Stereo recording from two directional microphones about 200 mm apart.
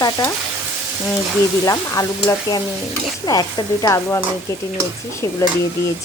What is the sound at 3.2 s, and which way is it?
Speech, 20° left (ahead or behind).